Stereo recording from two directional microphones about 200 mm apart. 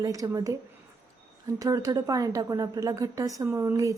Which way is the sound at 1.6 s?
15° right (ahead or behind).